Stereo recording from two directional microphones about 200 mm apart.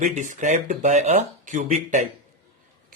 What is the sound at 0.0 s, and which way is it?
Speech, 40° right (ahead or behind).